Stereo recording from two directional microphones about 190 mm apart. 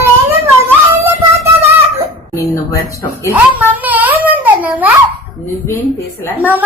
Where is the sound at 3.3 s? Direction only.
10° right (ahead or behind).